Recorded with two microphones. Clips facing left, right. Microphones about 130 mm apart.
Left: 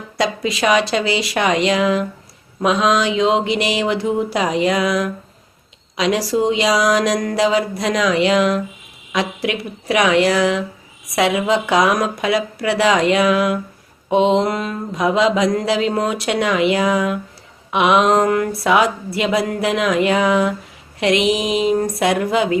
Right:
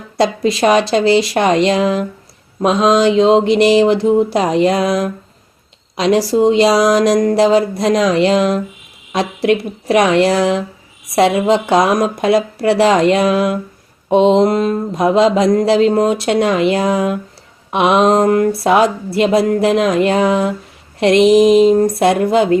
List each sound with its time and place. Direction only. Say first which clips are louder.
0.2 s mantra: right 6 dB; 30° right (ahead or behind)
6.3 s mantra: right 6 dB; 35° right (ahead or behind)
21.7 s mantra: right 5 dB; 35° right (ahead or behind)